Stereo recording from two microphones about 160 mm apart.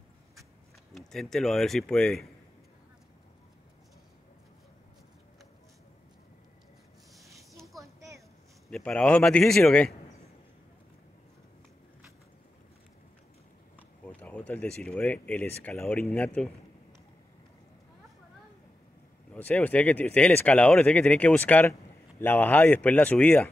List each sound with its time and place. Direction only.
0.9 s speech: centre (ahead or behind)
7.2 s a sound: 20° right (ahead or behind)
8.6 s speech: 5° left (ahead or behind)
13.7 s speech: 10° left (ahead or behind)
19.3 s speech: 10° left (ahead or behind)